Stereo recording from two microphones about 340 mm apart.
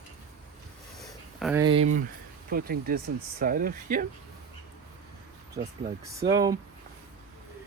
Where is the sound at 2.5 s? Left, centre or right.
Right.